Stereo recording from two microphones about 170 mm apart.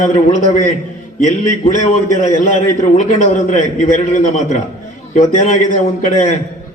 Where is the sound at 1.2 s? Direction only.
45° left (ahead or behind).